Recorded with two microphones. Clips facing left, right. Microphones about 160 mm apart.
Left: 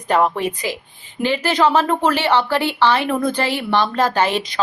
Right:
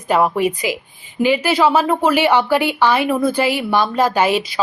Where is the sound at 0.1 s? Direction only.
10° right (ahead or behind).